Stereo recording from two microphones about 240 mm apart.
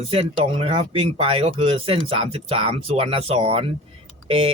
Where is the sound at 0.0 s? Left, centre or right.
Right.